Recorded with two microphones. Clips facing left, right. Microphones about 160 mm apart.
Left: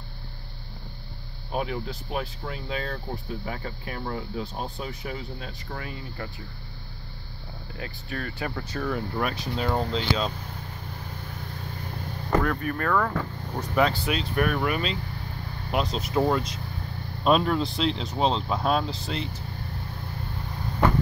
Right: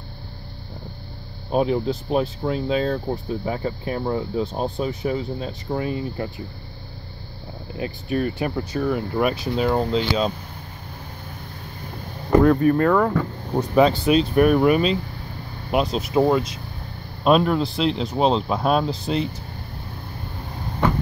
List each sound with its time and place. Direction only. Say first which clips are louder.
1.5 s speech: right 9 dB; 25° right (ahead or behind)
7.7 s speech: right 11 dB; 20° right (ahead or behind)
12.4 s speech: right 11 dB; 25° right (ahead or behind)